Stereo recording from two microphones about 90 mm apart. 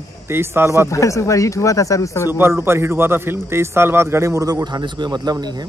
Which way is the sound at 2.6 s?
30° right (ahead or behind).